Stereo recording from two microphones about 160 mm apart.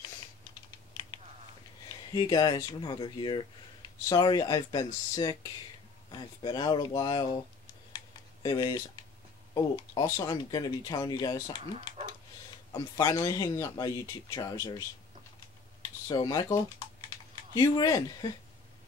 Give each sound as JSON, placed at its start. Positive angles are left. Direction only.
{"t": 2.1, "sound": "speech", "side_deg": 25}
{"t": 8.4, "sound": "speech", "side_deg": 25}
{"t": 12.7, "sound": "speech", "side_deg": 25}
{"t": 16.1, "sound": "speech", "side_deg": 25}